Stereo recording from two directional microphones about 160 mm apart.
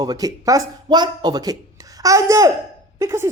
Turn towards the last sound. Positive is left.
turn(degrees=-15)  # may be behind; listen again after turning